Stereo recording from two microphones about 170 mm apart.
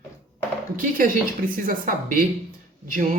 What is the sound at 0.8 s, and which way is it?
Speech, 55° right (ahead or behind).